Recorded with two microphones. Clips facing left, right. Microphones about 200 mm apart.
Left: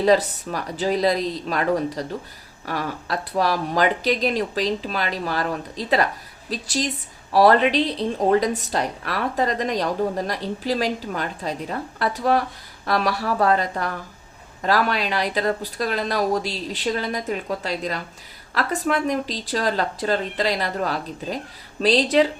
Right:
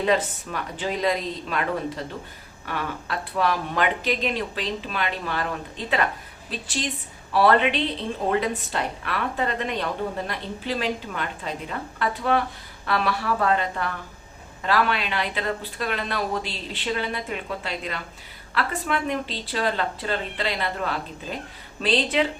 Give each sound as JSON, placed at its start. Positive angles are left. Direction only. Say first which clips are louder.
{"t": 0.0, "sound": "a woman's voice", "louder": "left 5 dB", "side_deg": 35}